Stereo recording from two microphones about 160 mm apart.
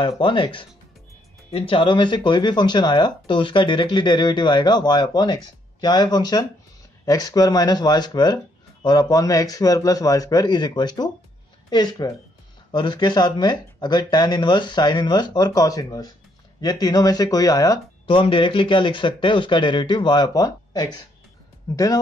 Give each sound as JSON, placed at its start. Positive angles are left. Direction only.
{"t": 0.2, "sound": "speech", "side_deg": 30}